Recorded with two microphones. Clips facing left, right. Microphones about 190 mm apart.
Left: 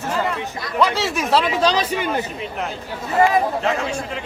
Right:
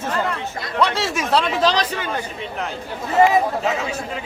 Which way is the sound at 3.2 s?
25° right (ahead or behind).